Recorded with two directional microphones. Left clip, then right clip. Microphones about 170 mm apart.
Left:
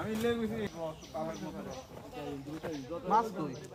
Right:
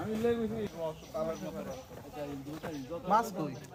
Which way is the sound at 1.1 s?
65° right (ahead or behind).